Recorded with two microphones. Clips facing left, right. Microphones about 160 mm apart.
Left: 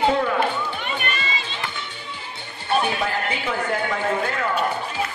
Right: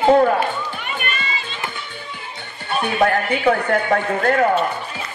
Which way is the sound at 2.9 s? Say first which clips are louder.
Right 7 dB; 60° right (ahead or behind).